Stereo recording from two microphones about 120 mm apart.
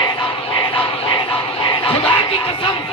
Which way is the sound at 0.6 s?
45° left (ahead or behind).